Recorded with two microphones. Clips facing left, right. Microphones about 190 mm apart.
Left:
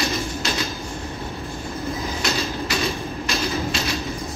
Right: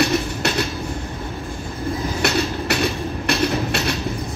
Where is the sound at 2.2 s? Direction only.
65° right (ahead or behind).